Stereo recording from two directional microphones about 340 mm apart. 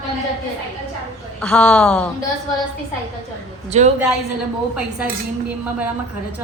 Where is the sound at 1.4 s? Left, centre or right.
Centre.